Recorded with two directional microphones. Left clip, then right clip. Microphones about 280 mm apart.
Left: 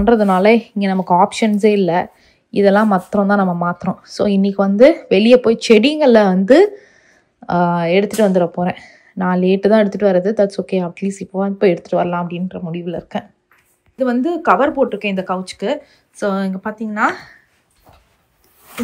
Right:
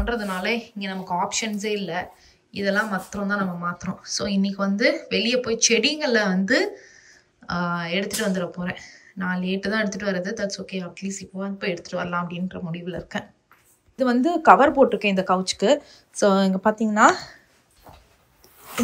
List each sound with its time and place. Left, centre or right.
0.0 s speech: centre